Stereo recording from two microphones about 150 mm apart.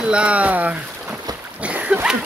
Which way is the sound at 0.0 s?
5° right (ahead or behind).